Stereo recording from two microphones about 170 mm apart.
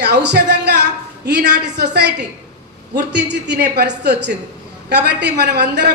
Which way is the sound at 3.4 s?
75° right (ahead or behind).